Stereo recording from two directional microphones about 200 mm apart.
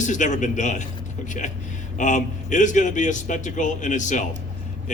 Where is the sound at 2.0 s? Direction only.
40° left (ahead or behind).